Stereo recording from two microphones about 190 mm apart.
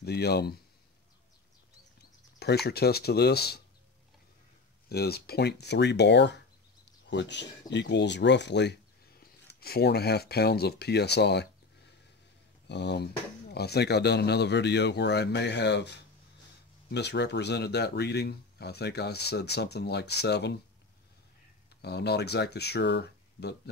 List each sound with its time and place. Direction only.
0.0 s speech: 60° left (ahead or behind)
2.3 s speech: 60° left (ahead or behind)
4.8 s speech: 55° left (ahead or behind)
9.2 s speech: 55° left (ahead or behind)
21.8 s speech: 60° left (ahead or behind)